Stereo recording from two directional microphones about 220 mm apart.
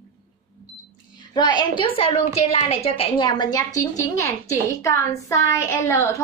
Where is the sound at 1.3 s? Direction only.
20° left (ahead or behind).